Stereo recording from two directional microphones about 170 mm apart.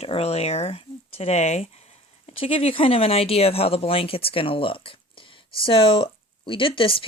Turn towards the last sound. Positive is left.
turn(degrees=30)  # may be behind; listen again after turning